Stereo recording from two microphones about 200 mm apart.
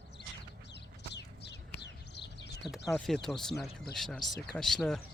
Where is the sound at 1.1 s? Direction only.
60° left (ahead or behind).